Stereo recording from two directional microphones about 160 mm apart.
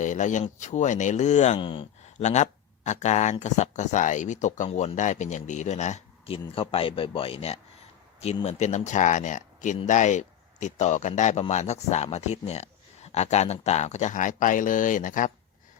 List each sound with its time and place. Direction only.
0.0 s speech: 50° left (ahead or behind)
1.5 s speech: 30° left (ahead or behind)
2.2 s speech: 45° left (ahead or behind)